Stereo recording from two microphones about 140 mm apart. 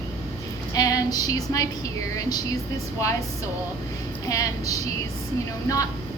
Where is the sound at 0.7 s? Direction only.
25° left (ahead or behind).